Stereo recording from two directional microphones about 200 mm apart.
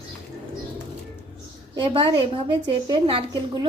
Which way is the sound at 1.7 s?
25° right (ahead or behind).